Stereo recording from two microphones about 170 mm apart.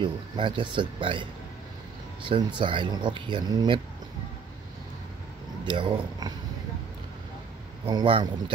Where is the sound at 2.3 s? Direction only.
30° right (ahead or behind).